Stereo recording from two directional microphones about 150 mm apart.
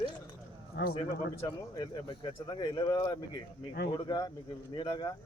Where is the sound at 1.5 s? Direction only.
25° left (ahead or behind).